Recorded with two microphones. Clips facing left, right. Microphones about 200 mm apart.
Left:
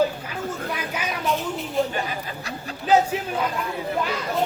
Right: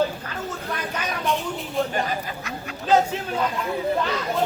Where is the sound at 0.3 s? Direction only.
10° left (ahead or behind).